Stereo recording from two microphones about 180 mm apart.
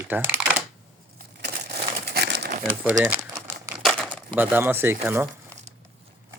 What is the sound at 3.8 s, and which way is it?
Crumpling, centre (ahead or behind).